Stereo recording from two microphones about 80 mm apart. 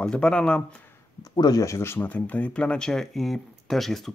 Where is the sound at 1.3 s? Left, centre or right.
Left.